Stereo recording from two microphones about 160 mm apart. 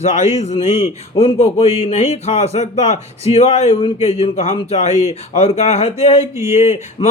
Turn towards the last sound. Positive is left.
turn(degrees=40)  # may be behind; listen again after turning